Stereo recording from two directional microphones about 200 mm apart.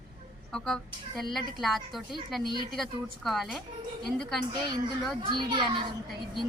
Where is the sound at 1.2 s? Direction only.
Centre (ahead or behind).